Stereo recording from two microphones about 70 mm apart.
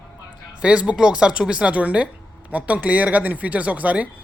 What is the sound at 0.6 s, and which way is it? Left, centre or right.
Speech, centre.